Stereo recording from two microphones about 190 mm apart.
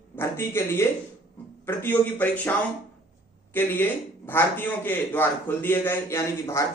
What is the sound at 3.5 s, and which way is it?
A man's voice, 10° left (ahead or behind).